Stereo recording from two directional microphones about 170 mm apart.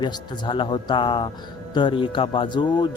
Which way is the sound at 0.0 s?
25° left (ahead or behind).